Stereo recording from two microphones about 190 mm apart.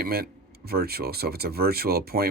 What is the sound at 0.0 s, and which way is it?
Speech, 50° right (ahead or behind).